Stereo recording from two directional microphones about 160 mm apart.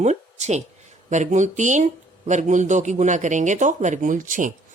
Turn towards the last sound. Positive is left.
turn(degrees=-55)  # may be behind; listen again after turning